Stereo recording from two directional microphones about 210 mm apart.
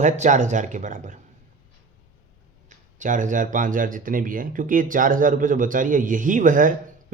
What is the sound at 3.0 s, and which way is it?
Speech, 35° right (ahead or behind).